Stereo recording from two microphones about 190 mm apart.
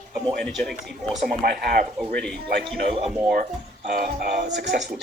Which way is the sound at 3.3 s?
50° right (ahead or behind).